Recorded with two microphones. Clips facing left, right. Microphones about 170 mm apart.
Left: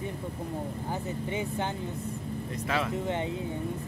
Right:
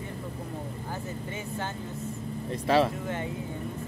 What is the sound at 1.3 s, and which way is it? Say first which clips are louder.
Speech: left 5 dB; 20° left (ahead or behind).